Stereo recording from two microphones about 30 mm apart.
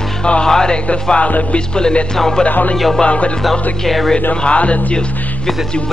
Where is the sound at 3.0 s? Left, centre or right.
Left.